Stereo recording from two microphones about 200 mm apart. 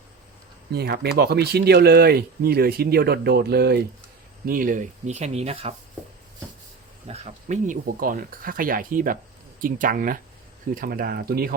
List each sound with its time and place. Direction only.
0.7 s speech: 55° right (ahead or behind); by 5.7 s 30° right (ahead or behind)
7.1 s speech: 35° right (ahead or behind)